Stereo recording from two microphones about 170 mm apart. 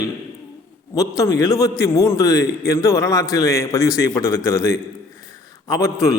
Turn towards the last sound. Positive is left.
turn(degrees=15)  # may be behind; listen again after turning